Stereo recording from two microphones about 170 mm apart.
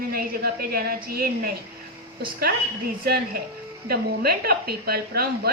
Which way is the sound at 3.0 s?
65° right (ahead or behind).